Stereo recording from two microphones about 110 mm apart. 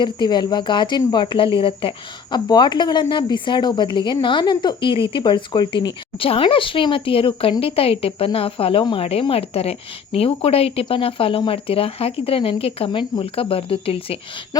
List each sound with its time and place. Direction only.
0.0 s speech: 45° left (ahead or behind)
2.5 s speech: 40° left (ahead or behind)
9.3 s speech: 65° left (ahead or behind)
14.5 s speech: 35° left (ahead or behind)